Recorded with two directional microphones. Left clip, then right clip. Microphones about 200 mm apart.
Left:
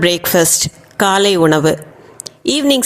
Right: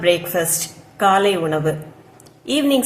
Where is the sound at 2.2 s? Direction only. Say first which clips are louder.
Left 4 dB; 50° left (ahead or behind).